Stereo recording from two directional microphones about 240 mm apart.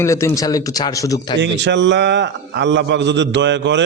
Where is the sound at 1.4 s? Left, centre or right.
Right.